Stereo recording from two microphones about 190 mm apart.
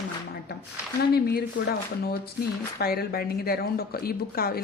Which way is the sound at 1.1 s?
55° left (ahead or behind).